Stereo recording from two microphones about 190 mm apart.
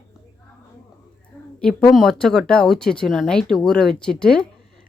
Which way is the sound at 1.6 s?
5° left (ahead or behind).